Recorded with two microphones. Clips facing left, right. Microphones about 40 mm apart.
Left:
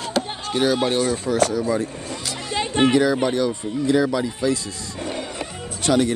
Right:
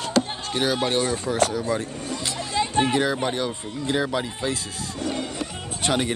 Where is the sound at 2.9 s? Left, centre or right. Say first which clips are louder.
Left 5 dB; centre.